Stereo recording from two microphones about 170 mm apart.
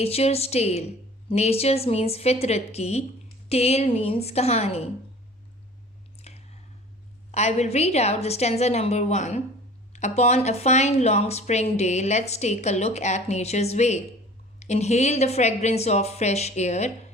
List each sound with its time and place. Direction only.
0.0 s a woman's voice: 35° left (ahead or behind)
6.1 s squish: 40° left (ahead or behind)
7.3 s a woman's voice: 40° left (ahead or behind)